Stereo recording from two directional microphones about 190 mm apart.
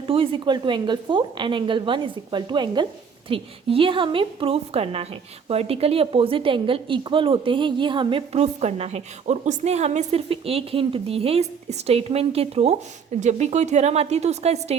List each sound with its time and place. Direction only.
0.1 s a woman's voice: 30° right (ahead or behind)